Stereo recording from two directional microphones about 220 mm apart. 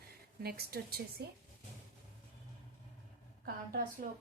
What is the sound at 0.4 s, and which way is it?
Speech, 45° right (ahead or behind).